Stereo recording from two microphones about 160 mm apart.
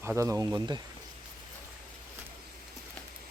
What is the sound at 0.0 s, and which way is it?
Speech, 15° right (ahead or behind).